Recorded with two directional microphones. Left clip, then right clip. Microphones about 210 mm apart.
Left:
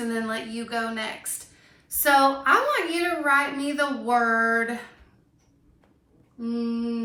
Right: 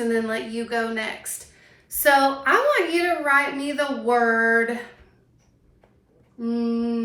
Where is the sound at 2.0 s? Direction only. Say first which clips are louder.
Right 1 dB; 25° left (ahead or behind).